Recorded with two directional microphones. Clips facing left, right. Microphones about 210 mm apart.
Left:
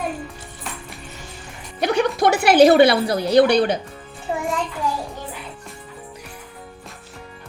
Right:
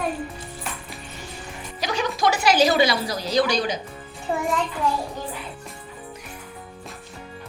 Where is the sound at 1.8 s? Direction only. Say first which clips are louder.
Left 6 dB; 60° left (ahead or behind).